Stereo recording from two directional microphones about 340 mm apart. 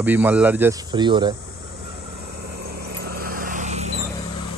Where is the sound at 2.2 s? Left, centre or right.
Right.